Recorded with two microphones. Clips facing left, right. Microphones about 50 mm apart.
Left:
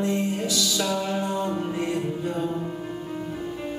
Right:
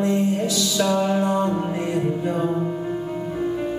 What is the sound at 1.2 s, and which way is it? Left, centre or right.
Music, right.